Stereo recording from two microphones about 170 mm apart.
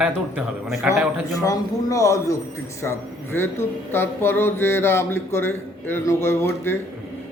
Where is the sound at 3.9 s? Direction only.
15° left (ahead or behind).